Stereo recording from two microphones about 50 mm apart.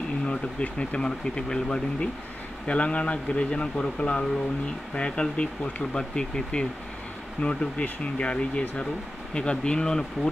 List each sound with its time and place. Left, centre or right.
0.3 s speech: left